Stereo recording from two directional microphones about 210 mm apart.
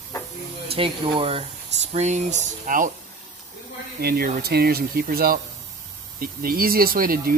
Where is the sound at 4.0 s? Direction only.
50° right (ahead or behind).